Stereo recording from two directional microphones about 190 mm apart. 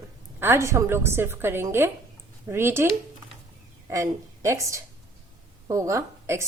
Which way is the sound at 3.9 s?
15° right (ahead or behind).